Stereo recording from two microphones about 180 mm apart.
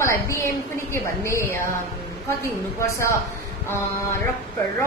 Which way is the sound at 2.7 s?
15° left (ahead or behind).